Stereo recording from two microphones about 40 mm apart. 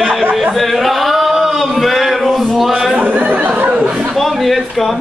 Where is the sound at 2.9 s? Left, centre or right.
Right.